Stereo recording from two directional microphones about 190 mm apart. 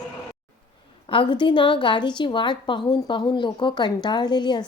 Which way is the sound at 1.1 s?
25° left (ahead or behind).